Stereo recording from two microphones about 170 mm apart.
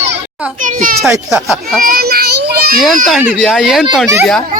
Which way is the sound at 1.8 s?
60° right (ahead or behind).